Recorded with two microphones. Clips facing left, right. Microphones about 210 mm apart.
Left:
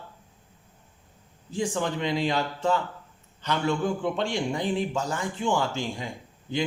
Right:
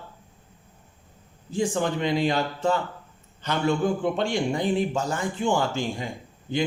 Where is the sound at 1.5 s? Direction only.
50° right (ahead or behind).